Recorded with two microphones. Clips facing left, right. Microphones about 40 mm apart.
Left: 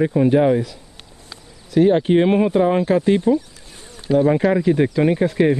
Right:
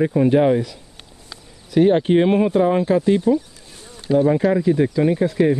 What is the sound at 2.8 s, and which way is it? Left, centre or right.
Speech, left.